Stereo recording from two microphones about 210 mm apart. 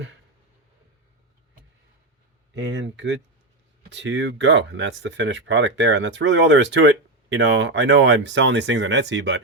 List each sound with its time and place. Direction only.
2.6 s speech: 60° right (ahead or behind)